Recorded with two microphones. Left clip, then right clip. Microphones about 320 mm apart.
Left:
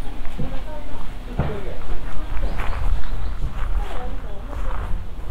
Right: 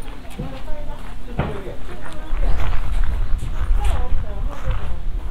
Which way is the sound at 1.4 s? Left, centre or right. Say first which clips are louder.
Right 2 dB; right.